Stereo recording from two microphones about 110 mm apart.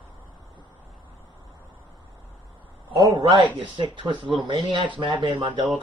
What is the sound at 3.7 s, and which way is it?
Speech, 45° right (ahead or behind).